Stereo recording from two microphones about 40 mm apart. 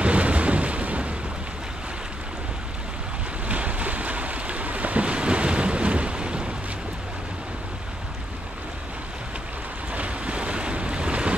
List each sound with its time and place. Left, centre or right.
0.0 s a sound: right
3.4 s boat: right
9.9 s waves: right